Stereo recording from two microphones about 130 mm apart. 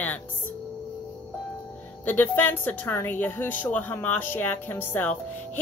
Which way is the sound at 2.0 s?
15° left (ahead or behind).